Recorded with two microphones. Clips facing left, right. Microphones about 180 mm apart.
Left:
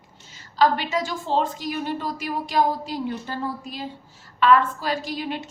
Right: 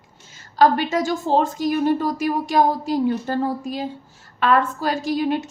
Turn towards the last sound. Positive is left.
turn(degrees=-45)  # may be behind; listen again after turning